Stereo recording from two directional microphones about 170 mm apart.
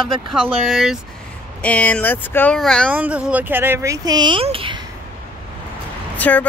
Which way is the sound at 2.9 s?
10° right (ahead or behind).